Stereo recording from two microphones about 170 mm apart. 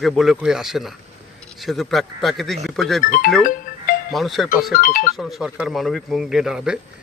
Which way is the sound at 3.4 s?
55° left (ahead or behind).